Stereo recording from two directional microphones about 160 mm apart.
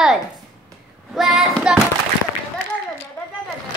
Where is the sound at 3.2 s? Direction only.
15° left (ahead or behind).